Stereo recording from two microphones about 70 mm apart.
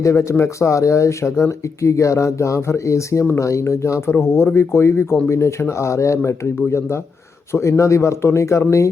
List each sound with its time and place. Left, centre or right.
0.0 s speech: left
4.1 s speech: left